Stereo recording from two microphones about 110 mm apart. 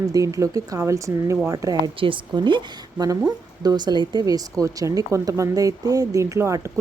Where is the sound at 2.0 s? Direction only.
50° right (ahead or behind); by 6.7 s 25° right (ahead or behind).